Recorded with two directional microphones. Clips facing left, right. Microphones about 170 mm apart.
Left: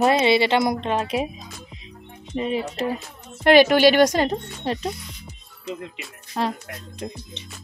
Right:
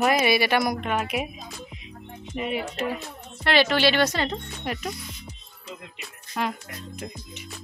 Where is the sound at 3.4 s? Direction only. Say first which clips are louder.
Left 7 dB; 50° left (ahead or behind).